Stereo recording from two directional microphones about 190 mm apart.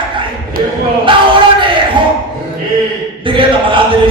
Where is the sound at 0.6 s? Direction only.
50° right (ahead or behind).